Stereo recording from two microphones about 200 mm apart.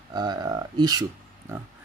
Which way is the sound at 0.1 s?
20° right (ahead or behind).